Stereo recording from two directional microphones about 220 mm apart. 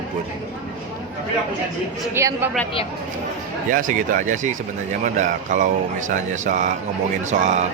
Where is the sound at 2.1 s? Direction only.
10° right (ahead or behind).